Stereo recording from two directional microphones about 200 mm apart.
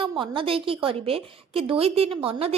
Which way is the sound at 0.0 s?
25° right (ahead or behind).